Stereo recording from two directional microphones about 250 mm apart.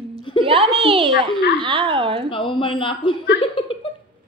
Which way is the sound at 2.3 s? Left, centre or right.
Centre.